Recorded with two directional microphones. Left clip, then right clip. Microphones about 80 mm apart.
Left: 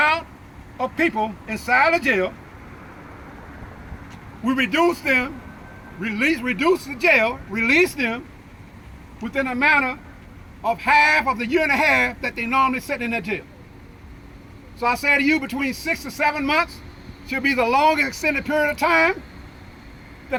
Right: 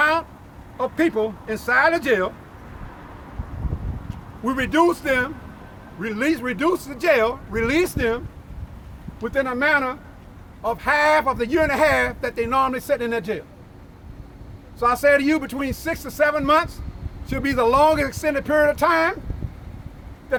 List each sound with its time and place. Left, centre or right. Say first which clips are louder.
0.0 s vehicle: even; right
0.8 s speech: even; right
4.4 s speech: even; right
9.3 s speech: left 1 dB; right
14.8 s speech: right 2 dB; right